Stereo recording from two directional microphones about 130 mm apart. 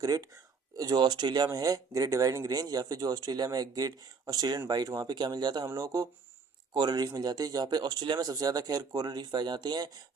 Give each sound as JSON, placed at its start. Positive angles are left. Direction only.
{"t": 0.0, "sound": "speech", "side_deg": -30}